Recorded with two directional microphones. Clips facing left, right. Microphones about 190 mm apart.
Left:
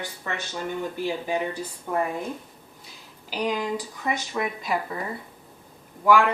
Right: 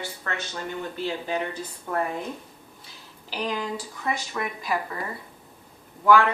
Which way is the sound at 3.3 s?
15° left (ahead or behind).